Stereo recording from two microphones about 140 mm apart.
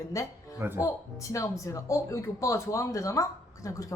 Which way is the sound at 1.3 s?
20° left (ahead or behind).